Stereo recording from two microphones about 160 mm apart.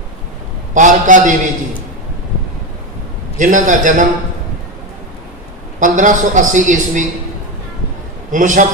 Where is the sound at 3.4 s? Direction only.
50° right (ahead or behind).